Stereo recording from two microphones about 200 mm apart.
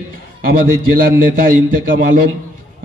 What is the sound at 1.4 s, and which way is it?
Speech, 45° right (ahead or behind).